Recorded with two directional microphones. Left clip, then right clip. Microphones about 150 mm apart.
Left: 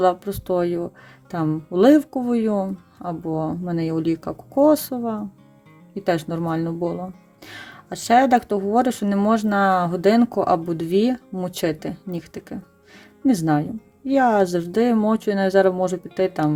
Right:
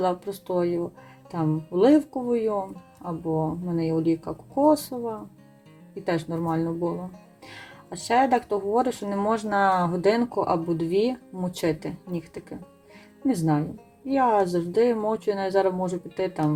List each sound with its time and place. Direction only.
0.0 s a woman's voice: 40° left (ahead or behind)